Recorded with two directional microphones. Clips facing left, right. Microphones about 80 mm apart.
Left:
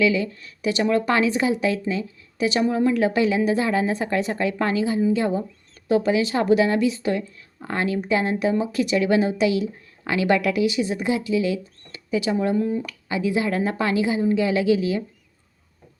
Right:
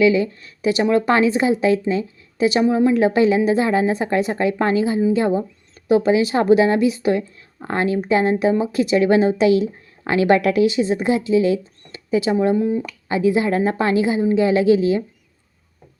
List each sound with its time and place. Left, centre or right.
0.0 s speech: right
12.5 s speech: centre
13.1 s speech: right